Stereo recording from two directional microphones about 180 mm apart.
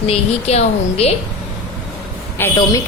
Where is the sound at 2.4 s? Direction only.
10° left (ahead or behind).